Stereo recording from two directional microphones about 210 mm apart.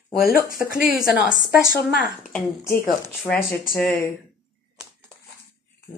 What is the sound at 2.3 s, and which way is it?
Speech, 10° left (ahead or behind).